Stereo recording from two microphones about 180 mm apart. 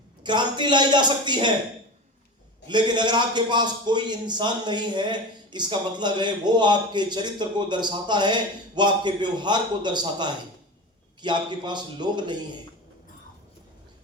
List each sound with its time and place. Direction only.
0.2 s a man's voice: 25° right (ahead or behind)
2.6 s a man's voice: 25° right (ahead or behind)